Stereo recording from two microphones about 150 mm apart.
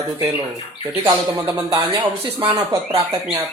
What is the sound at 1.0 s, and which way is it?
Speech, 15° right (ahead or behind).